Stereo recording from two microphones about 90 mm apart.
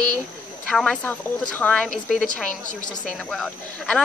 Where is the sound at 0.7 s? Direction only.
5° left (ahead or behind).